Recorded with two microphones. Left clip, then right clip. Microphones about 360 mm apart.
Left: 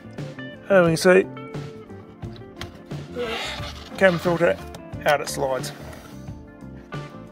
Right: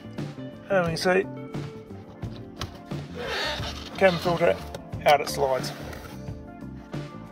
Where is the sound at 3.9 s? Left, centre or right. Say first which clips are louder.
Left 3 dB; centre.